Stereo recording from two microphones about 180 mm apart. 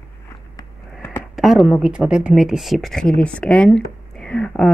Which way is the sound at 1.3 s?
Centre (ahead or behind).